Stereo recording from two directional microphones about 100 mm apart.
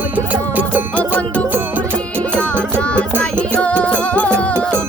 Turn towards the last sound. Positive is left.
turn(degrees=15)  # may be behind; listen again after turning